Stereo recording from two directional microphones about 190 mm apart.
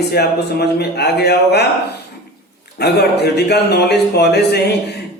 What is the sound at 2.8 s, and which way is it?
A man's voice, 60° left (ahead or behind).